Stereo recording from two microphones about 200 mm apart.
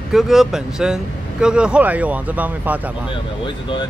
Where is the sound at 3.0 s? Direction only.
25° left (ahead or behind).